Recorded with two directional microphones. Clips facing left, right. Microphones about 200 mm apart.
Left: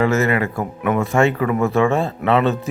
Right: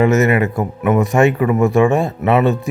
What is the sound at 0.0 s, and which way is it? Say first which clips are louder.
Speech: right 4 dB; 20° right (ahead or behind).